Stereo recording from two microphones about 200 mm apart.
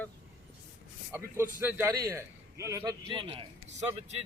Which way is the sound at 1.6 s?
15° right (ahead or behind).